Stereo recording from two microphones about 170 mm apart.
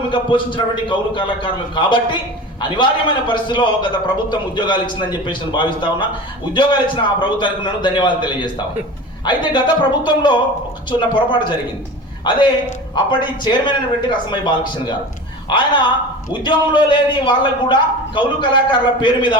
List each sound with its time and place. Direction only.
0.1 s a man's voice: 30° left (ahead or behind)
12.9 s a man's voice: 25° left (ahead or behind)